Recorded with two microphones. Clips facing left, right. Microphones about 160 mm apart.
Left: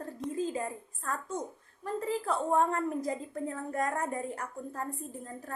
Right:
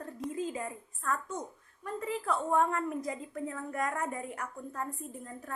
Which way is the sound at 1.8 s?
35° left (ahead or behind).